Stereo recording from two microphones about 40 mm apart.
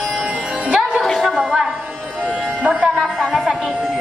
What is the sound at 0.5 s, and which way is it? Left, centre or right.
Music, right.